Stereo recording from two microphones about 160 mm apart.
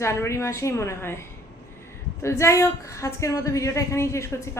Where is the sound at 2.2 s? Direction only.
20° left (ahead or behind).